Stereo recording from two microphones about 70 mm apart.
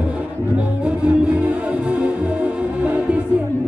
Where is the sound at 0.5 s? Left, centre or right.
Centre.